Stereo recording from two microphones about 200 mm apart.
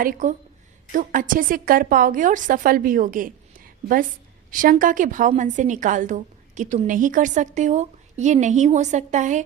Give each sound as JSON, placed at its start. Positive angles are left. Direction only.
{"t": 0.0, "sound": "a woman's voice", "side_deg": -40}